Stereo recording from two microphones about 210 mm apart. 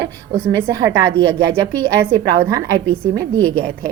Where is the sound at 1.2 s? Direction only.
70° right (ahead or behind).